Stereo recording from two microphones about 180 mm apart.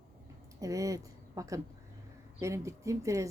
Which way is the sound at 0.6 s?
20° right (ahead or behind).